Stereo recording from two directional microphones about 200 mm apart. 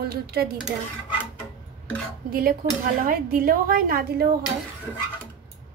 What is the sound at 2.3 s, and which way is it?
A woman's voice, 45° right (ahead or behind).